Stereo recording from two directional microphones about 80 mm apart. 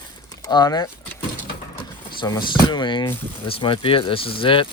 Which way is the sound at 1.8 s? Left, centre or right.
Left.